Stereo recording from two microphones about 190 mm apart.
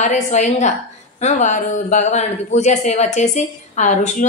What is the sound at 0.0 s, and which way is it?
A woman's voice, 40° left (ahead or behind).